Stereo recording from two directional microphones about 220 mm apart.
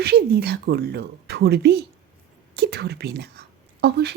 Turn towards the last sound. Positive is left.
turn(degrees=-45)  # may be behind; listen again after turning